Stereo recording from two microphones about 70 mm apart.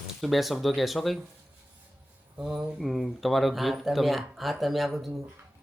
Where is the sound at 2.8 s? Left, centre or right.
Centre.